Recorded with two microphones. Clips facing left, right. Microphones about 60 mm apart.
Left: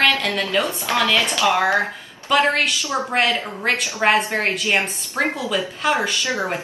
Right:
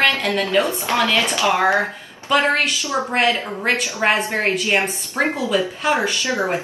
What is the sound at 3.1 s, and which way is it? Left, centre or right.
Speech, centre.